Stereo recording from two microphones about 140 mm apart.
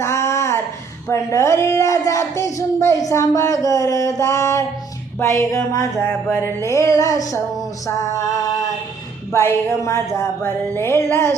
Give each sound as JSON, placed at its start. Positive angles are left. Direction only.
{"t": 0.0, "sound": "a sound", "side_deg": 20}
{"t": 1.0, "sound": "speech", "side_deg": 20}
{"t": 9.3, "sound": "music", "side_deg": 15}